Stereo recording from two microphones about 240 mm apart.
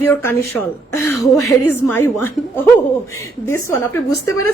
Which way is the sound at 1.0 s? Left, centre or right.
Left.